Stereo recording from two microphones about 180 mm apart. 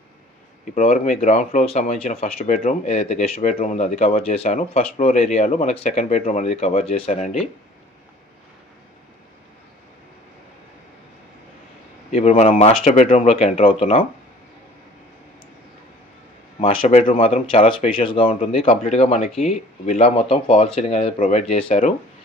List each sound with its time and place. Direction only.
0.7 s speech: 40° left (ahead or behind)
12.1 s speech: 35° left (ahead or behind)
16.5 s speech: 35° left (ahead or behind)